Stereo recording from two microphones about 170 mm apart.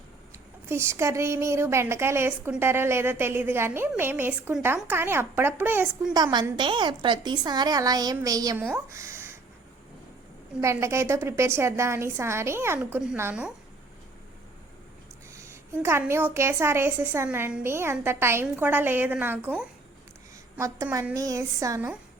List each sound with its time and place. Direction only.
0.7 s a woman's voice: 15° right (ahead or behind)
6.1 s a woman's voice: 20° right (ahead or behind)
10.6 s a woman's voice: 15° right (ahead or behind)
15.3 s a woman's voice: 15° right (ahead or behind)